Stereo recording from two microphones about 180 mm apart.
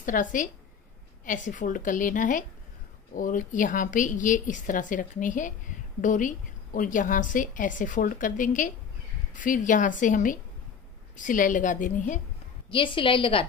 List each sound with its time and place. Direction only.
0.0 s a woman's voice: 45° left (ahead or behind)
12.7 s a woman's voice: 30° left (ahead or behind)